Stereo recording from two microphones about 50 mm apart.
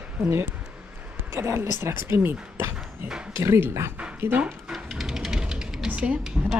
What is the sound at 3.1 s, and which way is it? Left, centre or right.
Speech, centre.